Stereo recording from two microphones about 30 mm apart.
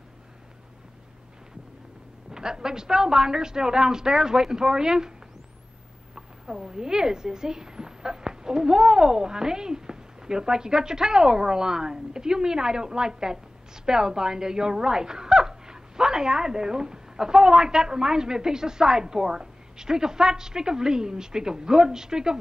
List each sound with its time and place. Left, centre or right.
2.3 s speech: right
6.1 s a woman's voice: right